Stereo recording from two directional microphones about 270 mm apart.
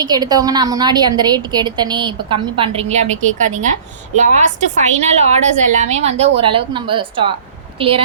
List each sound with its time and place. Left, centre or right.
0.0 s a woman's voice: centre